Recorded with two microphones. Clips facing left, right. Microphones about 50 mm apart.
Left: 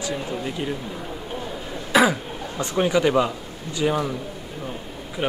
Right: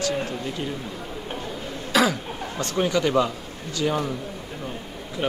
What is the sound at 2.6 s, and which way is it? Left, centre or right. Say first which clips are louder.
Speech: left 3 dB; centre.